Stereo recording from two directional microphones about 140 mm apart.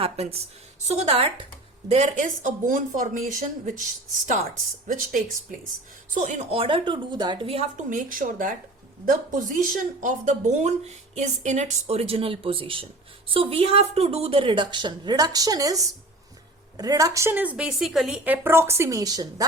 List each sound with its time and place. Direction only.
0.0 s a woman's voice: 45° right (ahead or behind)
1.9 s speech: 55° right (ahead or behind); by 3.8 s 80° right
4.9 s speech: 70° right (ahead or behind)
6.1 s a woman's voice: 60° right (ahead or behind); by 7.7 s 45° right (ahead or behind)
7.8 s a woman's voice: 70° right (ahead or behind); by 18.3 s 5° right (ahead or behind)
18.4 s a woman's voice: 15° right (ahead or behind)